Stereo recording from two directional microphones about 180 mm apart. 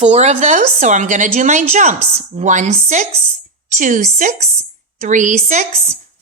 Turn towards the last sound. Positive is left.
turn(degrees=-40)  # may be behind; listen again after turning